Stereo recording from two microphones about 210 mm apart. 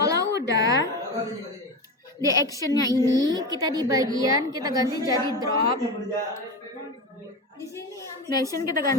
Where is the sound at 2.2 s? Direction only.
15° right (ahead or behind).